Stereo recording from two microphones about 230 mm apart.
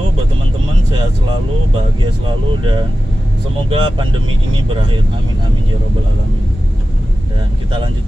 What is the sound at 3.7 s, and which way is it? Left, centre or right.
Speech, right.